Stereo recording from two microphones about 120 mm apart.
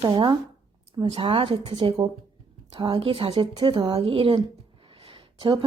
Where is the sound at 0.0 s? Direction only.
45° right (ahead or behind).